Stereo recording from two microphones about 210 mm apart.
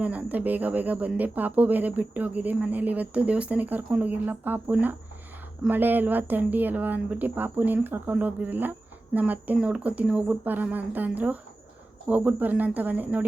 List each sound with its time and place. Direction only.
0.0 s speech: 5° right (ahead or behind)